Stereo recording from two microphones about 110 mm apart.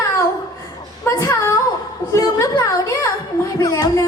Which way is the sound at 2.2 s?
30° left (ahead or behind).